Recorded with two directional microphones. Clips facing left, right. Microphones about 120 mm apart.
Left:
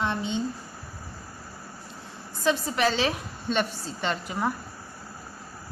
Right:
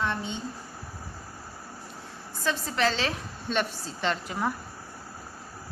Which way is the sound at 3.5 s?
Centre (ahead or behind).